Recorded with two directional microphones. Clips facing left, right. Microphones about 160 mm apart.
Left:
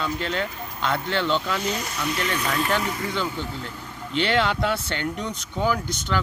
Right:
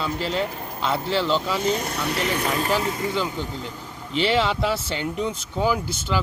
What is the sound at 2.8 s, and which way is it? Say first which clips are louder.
Speech: right 2 dB; 25° right (ahead or behind).